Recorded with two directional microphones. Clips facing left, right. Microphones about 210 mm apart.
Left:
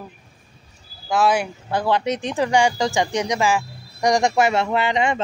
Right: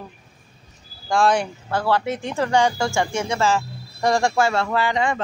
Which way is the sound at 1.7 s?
15° left (ahead or behind).